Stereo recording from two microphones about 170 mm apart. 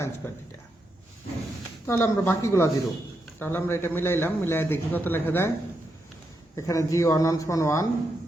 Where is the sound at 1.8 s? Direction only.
15° left (ahead or behind).